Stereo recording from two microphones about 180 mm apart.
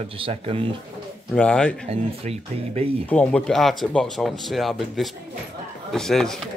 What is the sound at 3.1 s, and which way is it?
Speech, 5° left (ahead or behind).